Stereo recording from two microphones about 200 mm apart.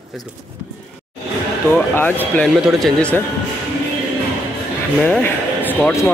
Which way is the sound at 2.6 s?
Centre (ahead or behind).